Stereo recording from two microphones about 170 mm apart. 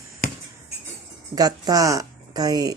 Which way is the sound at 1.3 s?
20° right (ahead or behind).